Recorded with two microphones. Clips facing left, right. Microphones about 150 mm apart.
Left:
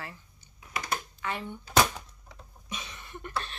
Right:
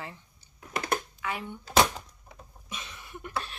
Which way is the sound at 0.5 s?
55° right (ahead or behind).